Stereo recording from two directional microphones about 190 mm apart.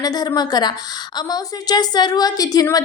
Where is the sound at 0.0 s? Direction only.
20° left (ahead or behind).